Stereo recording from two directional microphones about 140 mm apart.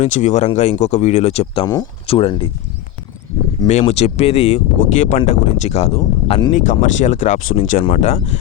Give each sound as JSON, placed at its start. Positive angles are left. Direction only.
{"t": 0.0, "sound": "speech", "side_deg": 55}
{"t": 1.6, "sound": "speech", "side_deg": 30}
{"t": 3.7, "sound": "speech", "side_deg": 55}
{"t": 6.5, "sound": "speech", "side_deg": 65}
{"t": 7.9, "sound": "speech", "side_deg": 50}